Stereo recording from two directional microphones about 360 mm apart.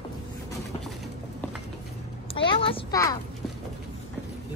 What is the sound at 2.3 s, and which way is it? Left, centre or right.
Speech, centre.